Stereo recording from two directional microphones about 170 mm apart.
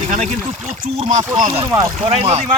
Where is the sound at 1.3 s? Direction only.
50° right (ahead or behind).